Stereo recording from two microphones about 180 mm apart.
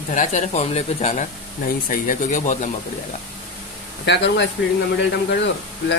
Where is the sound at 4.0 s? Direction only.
75° left (ahead or behind).